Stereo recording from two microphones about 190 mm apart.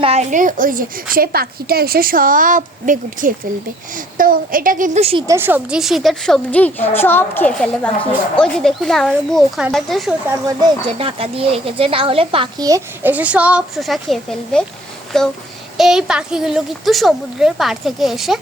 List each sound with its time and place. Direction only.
0.0 s a woman's voice: 35° right (ahead or behind)
5.2 s a woman's voice: 15° right (ahead or behind)
10.2 s a woman's voice: 20° right (ahead or behind); by 18.3 s centre (ahead or behind)